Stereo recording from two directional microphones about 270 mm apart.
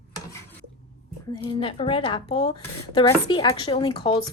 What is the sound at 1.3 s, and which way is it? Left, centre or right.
Speech, centre.